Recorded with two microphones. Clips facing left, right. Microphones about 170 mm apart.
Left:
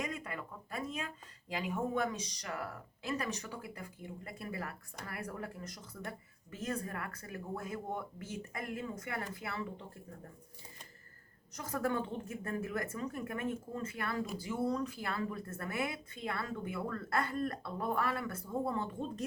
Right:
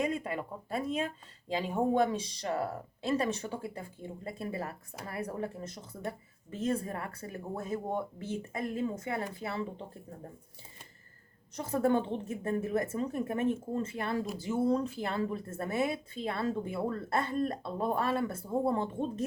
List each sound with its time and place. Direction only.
0.0 s speech: 30° right (ahead or behind)
11.5 s speech: 30° right (ahead or behind)